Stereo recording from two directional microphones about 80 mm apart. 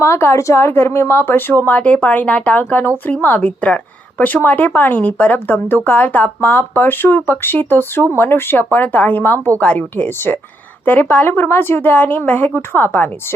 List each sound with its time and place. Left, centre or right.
0.0 s a woman's voice: left